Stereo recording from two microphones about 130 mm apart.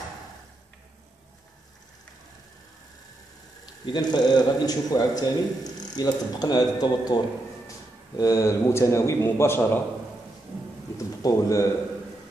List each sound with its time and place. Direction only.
3.8 s a man's voice: 35° left (ahead or behind)
8.2 s a man's voice: 25° left (ahead or behind)
11.2 s a man's voice: 25° left (ahead or behind)